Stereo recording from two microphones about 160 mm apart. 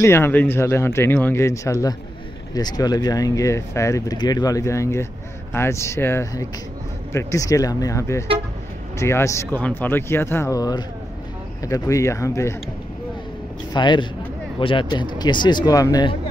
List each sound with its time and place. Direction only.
0.0 s speech: 15° left (ahead or behind)
13.7 s speech: 30° left (ahead or behind)